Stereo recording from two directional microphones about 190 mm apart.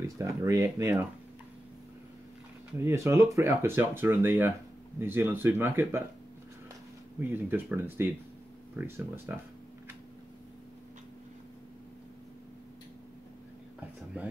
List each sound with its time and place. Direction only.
0.0 s speech: 15° right (ahead or behind)
2.8 s speech: 15° right (ahead or behind)
7.2 s speech: 10° right (ahead or behind)